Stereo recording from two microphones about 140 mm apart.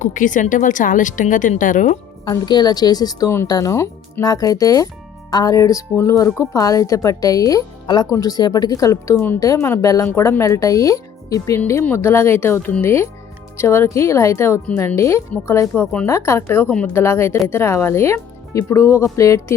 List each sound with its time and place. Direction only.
0.0 s a woman's voice: 65° left (ahead or behind)
2.2 s a woman's voice: 30° left (ahead or behind)